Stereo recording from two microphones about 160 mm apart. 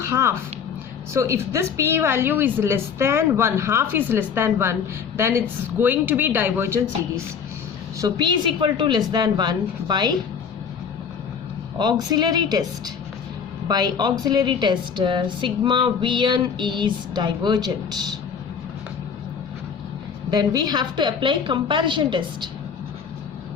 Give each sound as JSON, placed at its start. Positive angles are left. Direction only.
{"t": 0.1, "sound": "a woman's voice", "side_deg": -15}
{"t": 7.9, "sound": "a woman's voice", "side_deg": -25}
{"t": 11.8, "sound": "a woman's voice", "side_deg": -25}
{"t": 20.3, "sound": "a woman's voice", "side_deg": -25}